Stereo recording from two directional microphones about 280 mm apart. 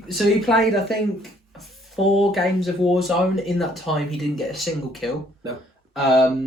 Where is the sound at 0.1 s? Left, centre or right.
Centre.